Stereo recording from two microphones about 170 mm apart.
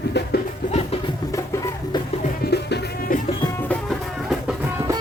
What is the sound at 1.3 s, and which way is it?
Music, 20° left (ahead or behind).